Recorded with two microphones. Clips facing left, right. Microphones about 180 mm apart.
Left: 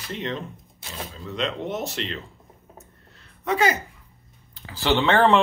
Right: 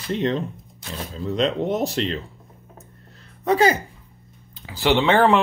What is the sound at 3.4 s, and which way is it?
Speech, 35° right (ahead or behind).